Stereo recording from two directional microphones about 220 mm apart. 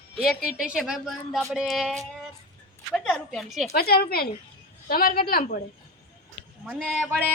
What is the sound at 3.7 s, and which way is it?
Speech, 45° left (ahead or behind).